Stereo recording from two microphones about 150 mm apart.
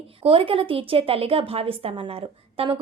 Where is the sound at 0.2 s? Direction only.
40° right (ahead or behind).